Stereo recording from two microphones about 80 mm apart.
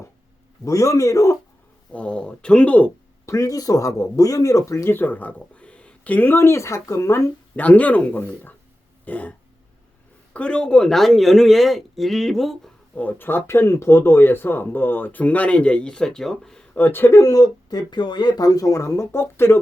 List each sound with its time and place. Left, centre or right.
0.6 s speech: left
1.9 s speech: centre
3.2 s speech: left
7.5 s speech: centre
9.0 s throat clearing: left
10.3 s speech: centre
13.0 s speech: left; by 16.6 s centre
16.7 s speech: left
17.2 s speech: left